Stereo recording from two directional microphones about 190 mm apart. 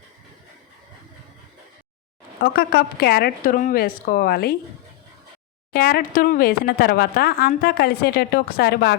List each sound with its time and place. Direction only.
2.4 s speech: 55° left (ahead or behind)
5.7 s speech: 50° left (ahead or behind)